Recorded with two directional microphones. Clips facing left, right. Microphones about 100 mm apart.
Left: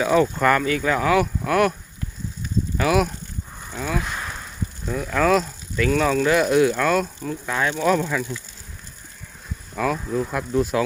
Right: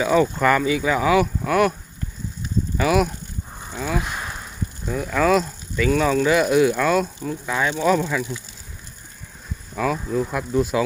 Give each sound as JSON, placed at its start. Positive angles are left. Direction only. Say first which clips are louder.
{"t": 0.0, "sound": "speech", "louder": "even", "side_deg": 0}
{"t": 2.7, "sound": "speech", "louder": "right 1 dB", "side_deg": 0}
{"t": 4.0, "sound": "a sound", "louder": "even", "side_deg": -15}
{"t": 4.9, "sound": "speech", "louder": "even", "side_deg": -5}
{"t": 8.3, "sound": "speech", "louder": "even", "side_deg": -20}
{"t": 9.7, "sound": "speech", "louder": "right 1 dB", "side_deg": 0}